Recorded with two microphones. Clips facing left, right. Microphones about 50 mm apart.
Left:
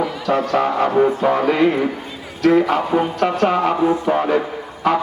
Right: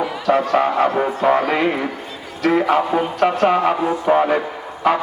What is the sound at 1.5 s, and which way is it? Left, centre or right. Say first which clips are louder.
A man's voice: left 3 dB; centre.